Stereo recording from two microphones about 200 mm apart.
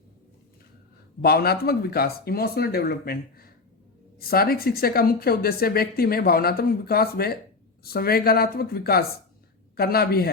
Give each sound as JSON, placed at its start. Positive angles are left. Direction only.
{"t": 1.2, "sound": "a woman's voice", "side_deg": 50}